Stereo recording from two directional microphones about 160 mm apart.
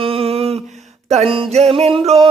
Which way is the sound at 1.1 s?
40° right (ahead or behind).